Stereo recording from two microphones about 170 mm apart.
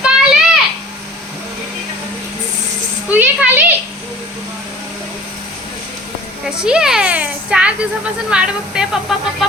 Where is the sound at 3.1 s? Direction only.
10° right (ahead or behind).